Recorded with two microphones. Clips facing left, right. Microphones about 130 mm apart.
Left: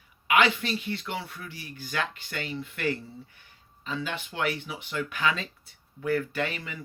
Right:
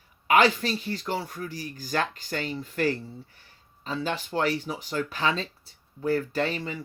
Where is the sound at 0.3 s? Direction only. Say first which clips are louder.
Right 3 dB; 40° right (ahead or behind).